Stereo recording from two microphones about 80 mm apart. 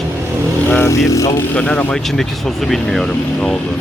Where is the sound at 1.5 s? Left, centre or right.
Centre.